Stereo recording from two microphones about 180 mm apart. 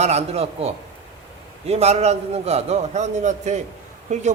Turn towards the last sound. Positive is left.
turn(degrees=-40)  # may be behind; listen again after turning